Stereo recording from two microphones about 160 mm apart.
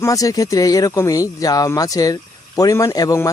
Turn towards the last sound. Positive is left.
turn(degrees=20)  # may be behind; listen again after turning